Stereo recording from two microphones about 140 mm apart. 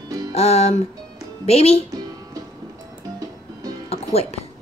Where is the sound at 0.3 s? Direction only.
50° left (ahead or behind).